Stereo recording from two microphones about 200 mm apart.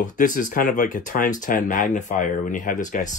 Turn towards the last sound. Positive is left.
turn(degrees=40)  # may be behind; listen again after turning